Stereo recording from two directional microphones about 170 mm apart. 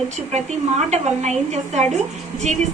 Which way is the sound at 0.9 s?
40° right (ahead or behind).